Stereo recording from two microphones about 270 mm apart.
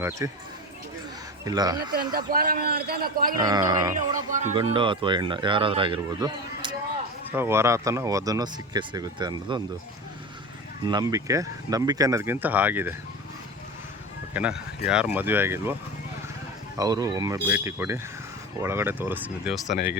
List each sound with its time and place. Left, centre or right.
0.0 s speech: centre
1.5 s speech: centre
2.1 s a man's voice: right
3.5 s speech: centre
4.3 s speech: right
10.8 s speech: centre
14.3 s speech: centre
16.7 s speech: centre